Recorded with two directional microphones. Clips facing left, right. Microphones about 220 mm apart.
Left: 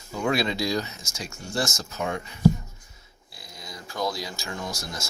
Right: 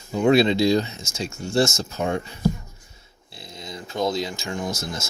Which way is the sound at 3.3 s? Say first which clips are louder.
Right 6 dB; 25° right (ahead or behind).